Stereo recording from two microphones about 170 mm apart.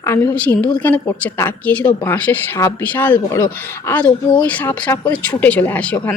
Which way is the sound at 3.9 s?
10° left (ahead or behind).